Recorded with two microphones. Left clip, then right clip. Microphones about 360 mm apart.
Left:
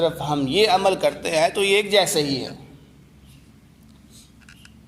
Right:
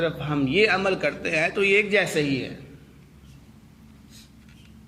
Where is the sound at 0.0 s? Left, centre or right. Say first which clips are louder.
Left 4 dB; centre.